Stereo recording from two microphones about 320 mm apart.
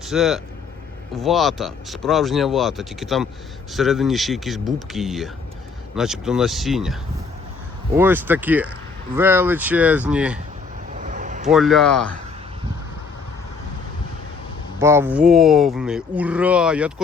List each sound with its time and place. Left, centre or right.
0.0 s speech: centre
7.9 s speech: centre
10.9 s vehicle: right
11.4 s speech: centre
14.8 s speech: centre